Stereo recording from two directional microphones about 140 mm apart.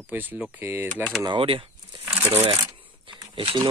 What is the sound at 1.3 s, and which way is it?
Speech, 40° right (ahead or behind).